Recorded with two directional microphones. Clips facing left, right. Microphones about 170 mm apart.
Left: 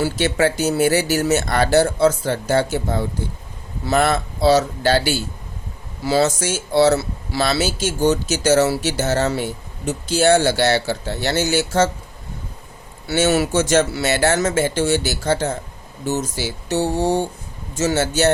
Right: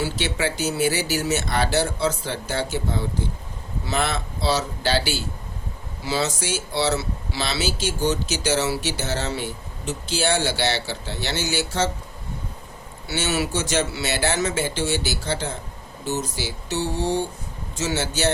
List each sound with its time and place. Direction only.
0.0 s speech: 45° left (ahead or behind)
13.1 s speech: 45° left (ahead or behind)